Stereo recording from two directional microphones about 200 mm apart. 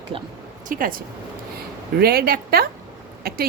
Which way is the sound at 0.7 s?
45° right (ahead or behind).